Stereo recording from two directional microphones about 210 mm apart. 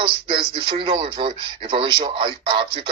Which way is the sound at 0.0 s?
25° right (ahead or behind).